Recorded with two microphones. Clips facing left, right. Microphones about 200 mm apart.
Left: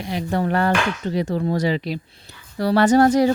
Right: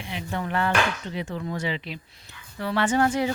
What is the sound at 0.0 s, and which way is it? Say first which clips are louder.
Speech: left 8 dB; 40° left (ahead or behind).